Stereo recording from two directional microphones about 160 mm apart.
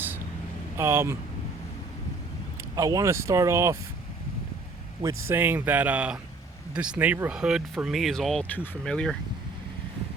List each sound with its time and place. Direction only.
0.8 s speech: 15° right (ahead or behind)
2.7 s speech: 20° right (ahead or behind)
5.0 s speech: 15° right (ahead or behind); by 9.1 s 5° left (ahead or behind)